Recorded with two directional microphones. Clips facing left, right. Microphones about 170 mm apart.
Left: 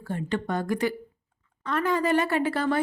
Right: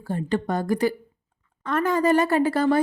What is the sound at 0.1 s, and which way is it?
Speech, 35° right (ahead or behind).